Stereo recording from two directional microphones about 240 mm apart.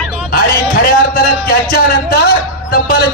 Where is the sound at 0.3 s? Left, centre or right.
Left.